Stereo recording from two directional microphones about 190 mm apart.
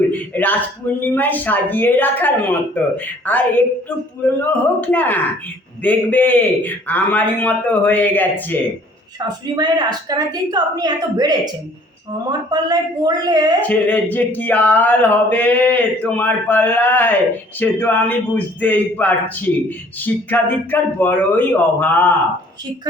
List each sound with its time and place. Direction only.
0.1 s a man's voice: 10° left (ahead or behind)
9.2 s a woman's voice: 20° right (ahead or behind)
13.6 s a man's voice: 10° left (ahead or behind)